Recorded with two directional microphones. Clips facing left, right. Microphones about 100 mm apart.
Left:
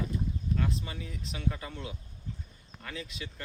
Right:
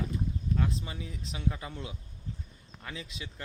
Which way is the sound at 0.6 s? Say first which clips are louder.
Right 1 dB; 20° right (ahead or behind).